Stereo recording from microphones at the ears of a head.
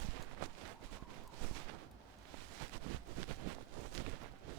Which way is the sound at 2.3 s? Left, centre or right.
Right.